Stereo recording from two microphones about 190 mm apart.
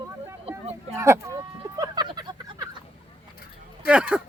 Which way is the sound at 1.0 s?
15° right (ahead or behind).